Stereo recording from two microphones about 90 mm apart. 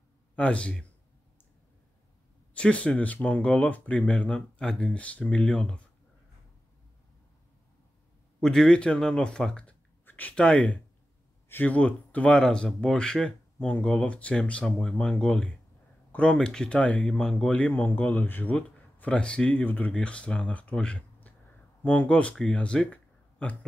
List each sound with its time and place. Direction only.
0.4 s speech: 15° left (ahead or behind)
2.5 s speech: 15° left (ahead or behind)
8.4 s speech: 5° left (ahead or behind)